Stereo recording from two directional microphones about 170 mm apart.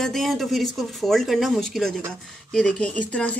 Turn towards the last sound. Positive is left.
turn(degrees=10)  # may be behind; listen again after turning